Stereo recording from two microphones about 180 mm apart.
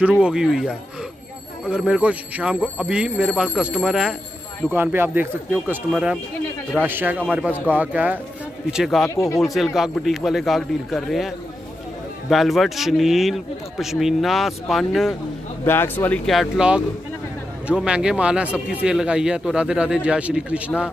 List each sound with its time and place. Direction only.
0.0 s speech: 5° right (ahead or behind)
9.1 s speech: 15° left (ahead or behind)
9.4 s speech: centre (ahead or behind)
15.6 s speech: 10° left (ahead or behind); by 20.9 s 5° right (ahead or behind)